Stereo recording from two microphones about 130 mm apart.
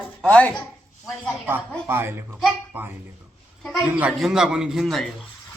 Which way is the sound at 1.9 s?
15° right (ahead or behind).